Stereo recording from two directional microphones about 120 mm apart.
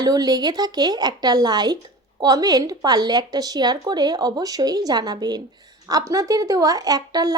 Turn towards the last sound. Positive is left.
turn(degrees=-30)  # may be behind; listen again after turning